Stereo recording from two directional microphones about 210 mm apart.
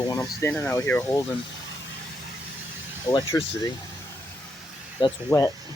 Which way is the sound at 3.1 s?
20° left (ahead or behind).